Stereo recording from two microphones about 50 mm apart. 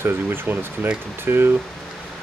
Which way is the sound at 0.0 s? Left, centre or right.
Right.